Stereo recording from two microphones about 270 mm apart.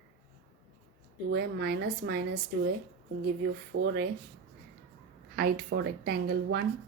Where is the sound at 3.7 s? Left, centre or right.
Right.